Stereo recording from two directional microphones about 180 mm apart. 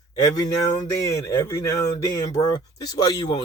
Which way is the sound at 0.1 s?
20° left (ahead or behind).